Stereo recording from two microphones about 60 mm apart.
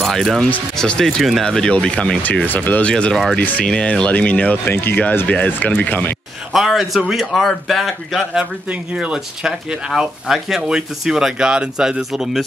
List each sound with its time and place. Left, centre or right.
0.0 s a man's voice: centre
1.4 s speech: centre
2.4 s speech: left
2.8 s speech: centre
6.5 s a man's voice: centre
8.9 s speech: centre